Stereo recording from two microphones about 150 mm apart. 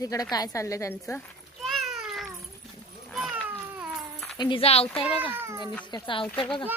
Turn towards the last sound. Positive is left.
turn(degrees=10)  # may be behind; listen again after turning